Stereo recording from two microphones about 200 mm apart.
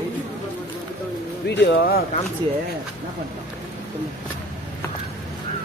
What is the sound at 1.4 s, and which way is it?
Speech, 60° left (ahead or behind).